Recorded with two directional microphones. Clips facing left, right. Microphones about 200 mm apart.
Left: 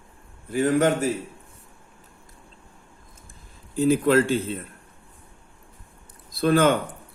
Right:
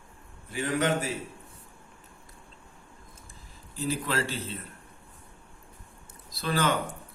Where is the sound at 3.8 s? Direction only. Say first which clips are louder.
Left 12 dB; 55° left (ahead or behind).